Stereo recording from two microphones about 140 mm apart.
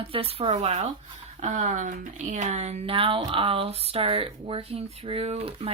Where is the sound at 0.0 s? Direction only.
45° right (ahead or behind).